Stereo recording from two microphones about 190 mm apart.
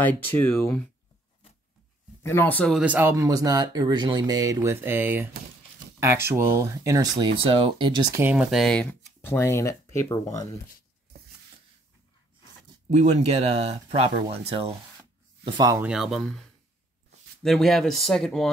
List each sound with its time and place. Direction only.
0.0 s speech: 10° left (ahead or behind)
2.2 s speech: 10° left (ahead or behind)
2.8 s speech: 10° right (ahead or behind); by 8.0 s 25° right (ahead or behind)
8.2 s speech: 10° right (ahead or behind); by 10.4 s 15° left (ahead or behind)
12.9 s speech: 35° right (ahead or behind)
15.4 s speech: 20° right (ahead or behind)
15.9 s speech: centre (ahead or behind)